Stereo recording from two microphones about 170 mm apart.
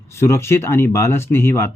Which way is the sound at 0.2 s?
15° left (ahead or behind).